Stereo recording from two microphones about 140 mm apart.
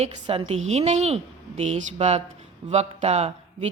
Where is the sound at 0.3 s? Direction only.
45° right (ahead or behind).